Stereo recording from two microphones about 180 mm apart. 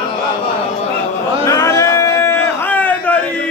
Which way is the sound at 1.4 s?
20° left (ahead or behind).